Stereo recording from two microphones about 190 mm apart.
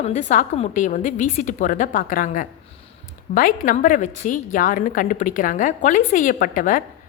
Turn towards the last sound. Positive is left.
turn(degrees=40)  # may be behind; listen again after turning